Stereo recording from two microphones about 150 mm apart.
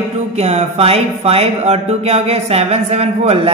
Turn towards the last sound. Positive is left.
turn(degrees=-45)  # may be behind; listen again after turning